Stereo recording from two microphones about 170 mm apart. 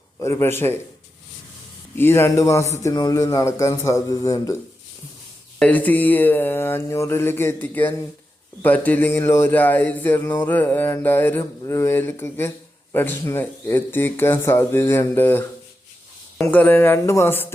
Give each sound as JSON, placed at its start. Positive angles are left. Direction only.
{"t": 0.2, "sound": "speech", "side_deg": 15}
{"t": 2.0, "sound": "speech", "side_deg": 15}
{"t": 5.5, "sound": "speech", "side_deg": 10}
{"t": 16.5, "sound": "speech", "side_deg": 10}